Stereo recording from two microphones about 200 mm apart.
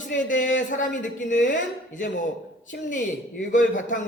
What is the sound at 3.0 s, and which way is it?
A man's voice, 40° left (ahead or behind).